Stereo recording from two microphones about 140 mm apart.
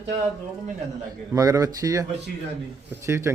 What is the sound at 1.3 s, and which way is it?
Speech, 25° right (ahead or behind).